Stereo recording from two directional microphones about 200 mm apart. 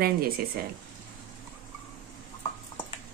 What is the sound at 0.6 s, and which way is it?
Speech, 45° right (ahead or behind).